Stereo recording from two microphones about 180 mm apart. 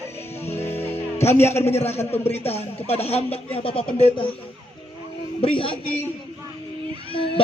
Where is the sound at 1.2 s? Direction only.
15° left (ahead or behind).